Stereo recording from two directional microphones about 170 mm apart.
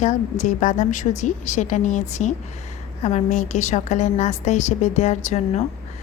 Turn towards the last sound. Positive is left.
turn(degrees=40)  # may be behind; listen again after turning